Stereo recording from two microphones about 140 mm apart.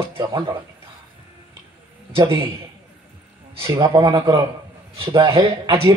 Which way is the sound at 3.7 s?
35° right (ahead or behind).